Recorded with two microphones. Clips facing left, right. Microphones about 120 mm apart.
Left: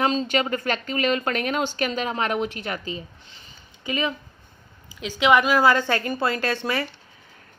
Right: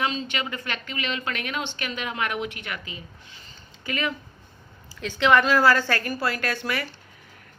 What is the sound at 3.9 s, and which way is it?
A woman's voice, 20° left (ahead or behind).